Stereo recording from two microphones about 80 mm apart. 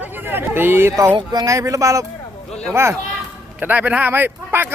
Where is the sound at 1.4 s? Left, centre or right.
Right.